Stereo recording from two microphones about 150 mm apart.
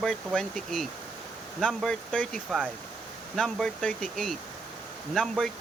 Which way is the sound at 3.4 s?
5° left (ahead or behind).